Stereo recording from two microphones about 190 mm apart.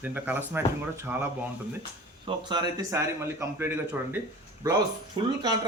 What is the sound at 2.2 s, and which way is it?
Speech, 20° right (ahead or behind).